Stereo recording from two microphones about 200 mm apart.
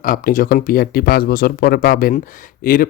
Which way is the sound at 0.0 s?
45° left (ahead or behind).